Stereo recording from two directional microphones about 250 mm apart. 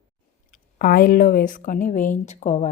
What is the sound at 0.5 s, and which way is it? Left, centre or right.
Speech, left.